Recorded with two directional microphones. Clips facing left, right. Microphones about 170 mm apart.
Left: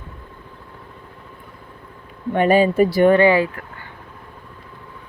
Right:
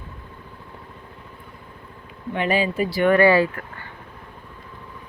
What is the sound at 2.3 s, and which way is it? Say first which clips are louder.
Speech: left 7 dB; 45° left (ahead or behind).